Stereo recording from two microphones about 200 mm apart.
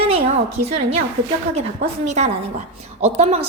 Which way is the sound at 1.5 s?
35° right (ahead or behind).